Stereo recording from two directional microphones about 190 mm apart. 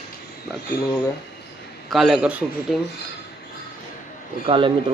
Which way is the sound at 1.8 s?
Centre (ahead or behind).